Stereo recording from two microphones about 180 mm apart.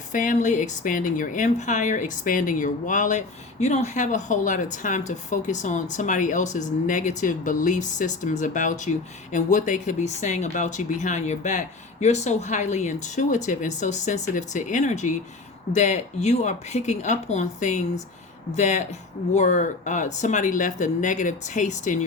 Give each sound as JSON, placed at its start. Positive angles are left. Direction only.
{"t": 0.1, "sound": "speech", "side_deg": 45}